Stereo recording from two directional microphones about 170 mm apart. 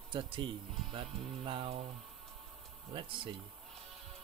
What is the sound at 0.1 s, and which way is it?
Speech, 30° right (ahead or behind).